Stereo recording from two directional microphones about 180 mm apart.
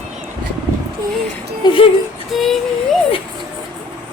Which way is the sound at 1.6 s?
25° left (ahead or behind).